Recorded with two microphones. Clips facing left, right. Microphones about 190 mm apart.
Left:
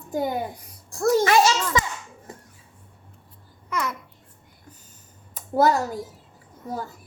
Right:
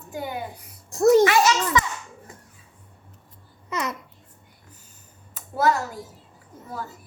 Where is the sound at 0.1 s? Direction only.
40° left (ahead or behind).